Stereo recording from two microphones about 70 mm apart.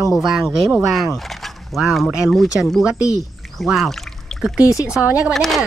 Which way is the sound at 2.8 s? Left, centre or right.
Centre.